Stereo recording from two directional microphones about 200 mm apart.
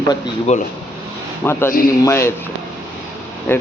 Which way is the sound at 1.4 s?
10° left (ahead or behind).